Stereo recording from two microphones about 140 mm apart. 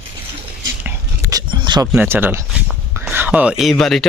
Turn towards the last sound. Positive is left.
turn(degrees=0)  # may be behind; listen again after turning